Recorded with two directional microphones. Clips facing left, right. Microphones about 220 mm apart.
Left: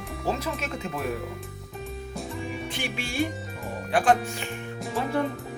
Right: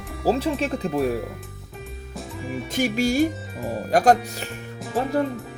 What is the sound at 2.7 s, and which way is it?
Speech, 40° right (ahead or behind).